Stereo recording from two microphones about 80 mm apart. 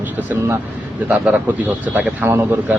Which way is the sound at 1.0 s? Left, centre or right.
Centre.